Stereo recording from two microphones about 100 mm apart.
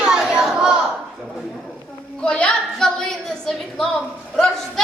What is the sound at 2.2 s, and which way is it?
A woman's voice, 10° left (ahead or behind).